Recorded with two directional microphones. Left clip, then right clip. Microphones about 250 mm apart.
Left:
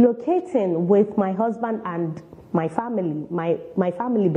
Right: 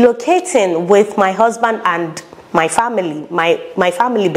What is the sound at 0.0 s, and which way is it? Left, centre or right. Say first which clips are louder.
A woman's voice: right 8 dB; centre.